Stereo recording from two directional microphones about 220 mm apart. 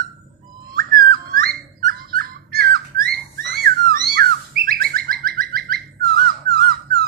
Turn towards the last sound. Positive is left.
turn(degrees=-45)  # may be behind; listen again after turning